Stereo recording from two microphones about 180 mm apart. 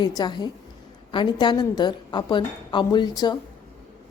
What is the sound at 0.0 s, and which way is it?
A woman's voice, 25° left (ahead or behind).